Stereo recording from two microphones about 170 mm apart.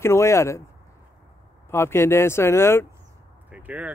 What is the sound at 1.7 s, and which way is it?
Speech, 15° left (ahead or behind).